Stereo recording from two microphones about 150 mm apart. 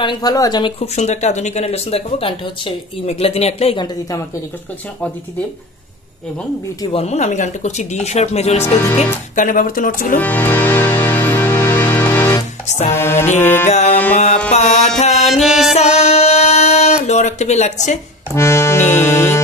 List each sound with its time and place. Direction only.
0.0 s speech: 30° left (ahead or behind)
0.9 s speech: 50° left (ahead or behind)
6.9 s speech: 45° left (ahead or behind)
8.9 s speech: 60° left (ahead or behind)
10.1 s music: 10° left (ahead or behind)
12.6 s music: 50° left (ahead or behind)
12.9 s music: 15° left (ahead or behind)
13.7 s music: 50° left (ahead or behind)
15.3 s music: centre (ahead or behind)
15.7 s a sound: 45° left (ahead or behind)
18.3 s accordion: 20° left (ahead or behind)